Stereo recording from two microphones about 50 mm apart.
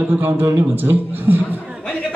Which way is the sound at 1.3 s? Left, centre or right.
Right.